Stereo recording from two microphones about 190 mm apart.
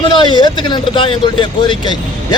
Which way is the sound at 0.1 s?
25° left (ahead or behind).